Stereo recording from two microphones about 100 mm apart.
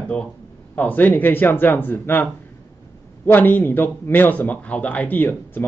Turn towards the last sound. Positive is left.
turn(degrees=15)  # may be behind; listen again after turning